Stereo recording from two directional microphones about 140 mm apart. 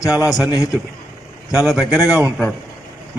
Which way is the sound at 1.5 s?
5° right (ahead or behind).